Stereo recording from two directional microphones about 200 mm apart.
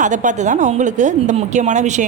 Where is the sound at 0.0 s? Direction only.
40° right (ahead or behind).